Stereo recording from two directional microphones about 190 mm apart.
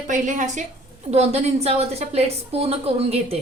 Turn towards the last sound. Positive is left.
turn(degrees=-30)  # may be behind; listen again after turning